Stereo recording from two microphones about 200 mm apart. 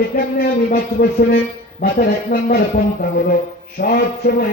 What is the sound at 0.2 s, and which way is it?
Speech, 45° left (ahead or behind).